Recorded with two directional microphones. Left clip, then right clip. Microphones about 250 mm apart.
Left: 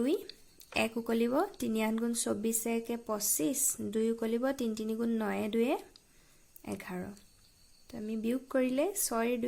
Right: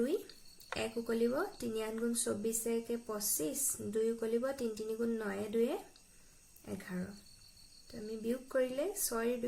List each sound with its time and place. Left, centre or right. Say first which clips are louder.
0.0 s speech: left 3 dB; left
8.1 s speech: left 3 dB; left